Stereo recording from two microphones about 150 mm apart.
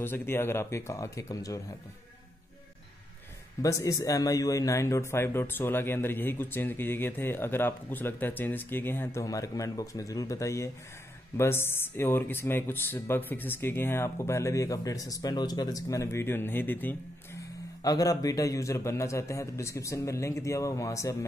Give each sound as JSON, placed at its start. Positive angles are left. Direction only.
{"t": 0.0, "sound": "speech", "side_deg": 15}
{"t": 3.6, "sound": "speech", "side_deg": 20}